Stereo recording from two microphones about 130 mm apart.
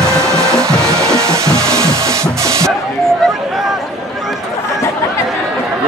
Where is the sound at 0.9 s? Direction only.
20° right (ahead or behind).